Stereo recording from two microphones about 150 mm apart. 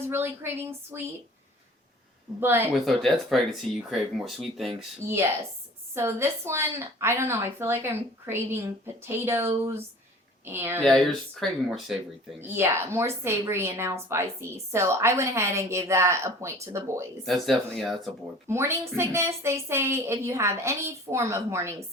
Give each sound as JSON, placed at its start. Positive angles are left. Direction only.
{"t": 0.0, "sound": "a woman's voice", "side_deg": -15}
{"t": 2.4, "sound": "a woman's voice", "side_deg": -15}
{"t": 2.8, "sound": "speech", "side_deg": 0}
{"t": 5.0, "sound": "a woman's voice", "side_deg": -15}
{"t": 10.8, "sound": "speech", "side_deg": 0}
{"t": 12.4, "sound": "a woman's voice", "side_deg": -15}
{"t": 17.2, "sound": "speech", "side_deg": 0}
{"t": 18.4, "sound": "a woman's voice", "side_deg": -15}